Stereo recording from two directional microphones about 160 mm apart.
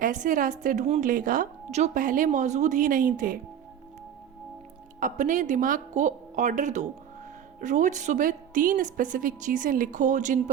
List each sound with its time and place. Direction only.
0.0 s a woman's voice: 55° right (ahead or behind)
4.9 s a woman's voice: 55° right (ahead or behind)